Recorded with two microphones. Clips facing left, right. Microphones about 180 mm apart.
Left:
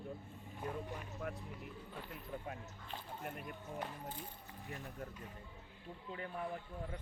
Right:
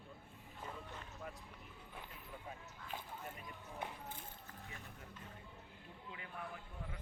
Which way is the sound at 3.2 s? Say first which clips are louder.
Left 5 dB; 60° left (ahead or behind).